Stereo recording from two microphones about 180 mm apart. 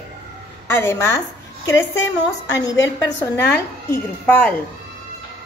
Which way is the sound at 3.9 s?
10° left (ahead or behind).